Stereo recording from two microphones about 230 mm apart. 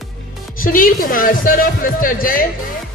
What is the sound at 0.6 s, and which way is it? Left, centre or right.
Speech, left.